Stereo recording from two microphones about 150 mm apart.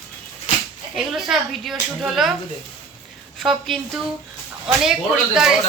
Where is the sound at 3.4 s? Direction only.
Centre (ahead or behind).